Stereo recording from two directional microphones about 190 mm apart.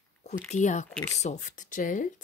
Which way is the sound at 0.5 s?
40° left (ahead or behind).